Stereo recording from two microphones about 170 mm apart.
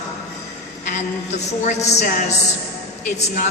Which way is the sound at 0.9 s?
45° left (ahead or behind).